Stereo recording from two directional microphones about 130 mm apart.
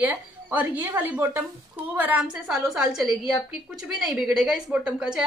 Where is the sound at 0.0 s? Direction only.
15° right (ahead or behind).